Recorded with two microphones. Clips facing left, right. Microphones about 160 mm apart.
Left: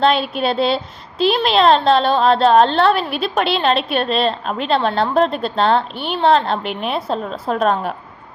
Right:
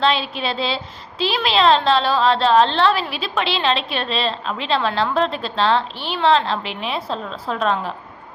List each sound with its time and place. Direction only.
0.0 s a woman's voice: 50° left (ahead or behind)